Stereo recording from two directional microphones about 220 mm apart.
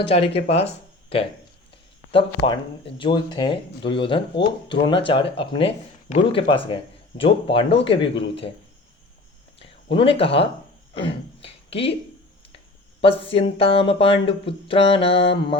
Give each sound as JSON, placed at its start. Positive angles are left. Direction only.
{"t": 0.1, "sound": "speech", "side_deg": 25}
{"t": 9.6, "sound": "speech", "side_deg": 25}
{"t": 11.4, "sound": "a sound", "side_deg": 25}
{"t": 13.0, "sound": "speech", "side_deg": 25}